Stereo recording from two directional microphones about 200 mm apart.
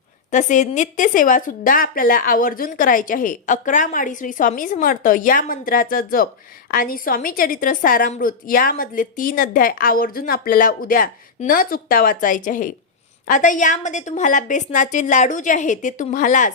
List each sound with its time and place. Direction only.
0.3 s a woman's voice: 40° left (ahead or behind)